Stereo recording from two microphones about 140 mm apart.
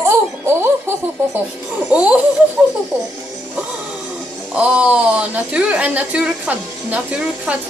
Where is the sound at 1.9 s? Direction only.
10° right (ahead or behind).